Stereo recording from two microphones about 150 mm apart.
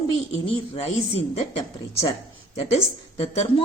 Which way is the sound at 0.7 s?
40° left (ahead or behind).